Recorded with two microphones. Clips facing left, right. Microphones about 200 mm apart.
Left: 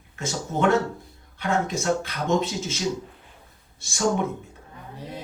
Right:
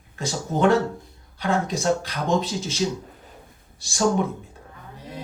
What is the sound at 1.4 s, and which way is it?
Speech, 35° right (ahead or behind).